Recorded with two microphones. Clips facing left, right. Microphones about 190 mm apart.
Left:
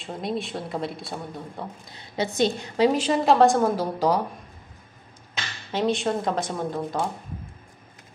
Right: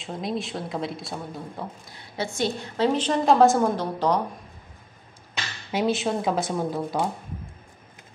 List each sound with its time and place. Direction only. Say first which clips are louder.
0.0 s speech: even; centre (ahead or behind)
2.1 s a woman's voice: left 3 dB; 20° left (ahead or behind)
5.7 s speech: even; 10° right (ahead or behind)